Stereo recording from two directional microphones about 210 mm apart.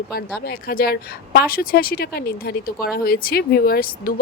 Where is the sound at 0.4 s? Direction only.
45° left (ahead or behind).